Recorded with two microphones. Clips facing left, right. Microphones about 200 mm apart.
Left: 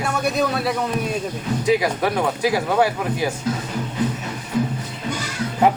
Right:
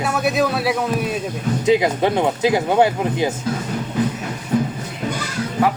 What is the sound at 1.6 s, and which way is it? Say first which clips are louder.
Speech: right 3 dB; 25° right (ahead or behind).